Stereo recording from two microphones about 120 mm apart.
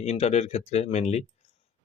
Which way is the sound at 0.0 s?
65° left (ahead or behind).